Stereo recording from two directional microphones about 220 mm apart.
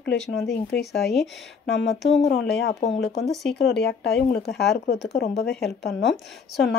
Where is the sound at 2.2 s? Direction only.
50° left (ahead or behind).